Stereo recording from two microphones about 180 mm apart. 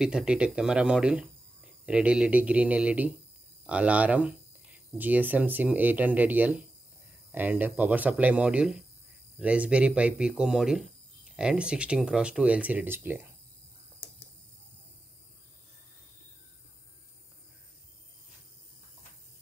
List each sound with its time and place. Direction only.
0.0 s speech: 5° right (ahead or behind)